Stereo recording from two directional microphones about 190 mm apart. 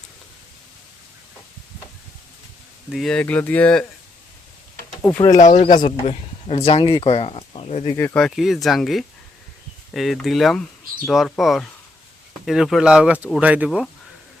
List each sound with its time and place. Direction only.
2.9 s speech: 5° left (ahead or behind)
5.0 s speech: 10° left (ahead or behind)
5.3 s speech: 40° left (ahead or behind)
7.9 s speech: 10° left (ahead or behind)